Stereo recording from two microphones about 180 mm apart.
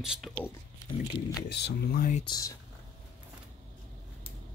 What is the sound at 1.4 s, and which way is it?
Speech, 70° left (ahead or behind).